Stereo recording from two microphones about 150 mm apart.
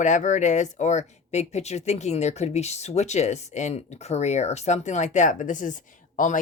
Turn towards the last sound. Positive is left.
turn(degrees=55)  # may be behind; listen again after turning